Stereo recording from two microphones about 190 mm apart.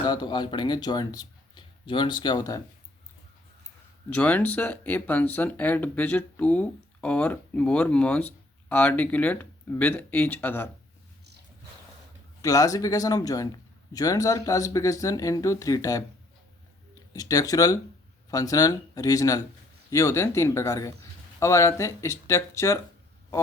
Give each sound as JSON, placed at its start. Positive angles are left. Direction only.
{"t": 0.0, "sound": "speech", "side_deg": 20}
{"t": 4.1, "sound": "speech", "side_deg": 10}
{"t": 12.4, "sound": "speech", "side_deg": 20}
{"t": 17.2, "sound": "speech", "side_deg": 20}